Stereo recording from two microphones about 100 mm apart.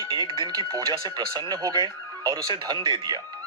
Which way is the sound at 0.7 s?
40° right (ahead or behind).